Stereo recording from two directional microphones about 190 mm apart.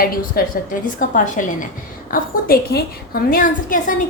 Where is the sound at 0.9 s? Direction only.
45° left (ahead or behind).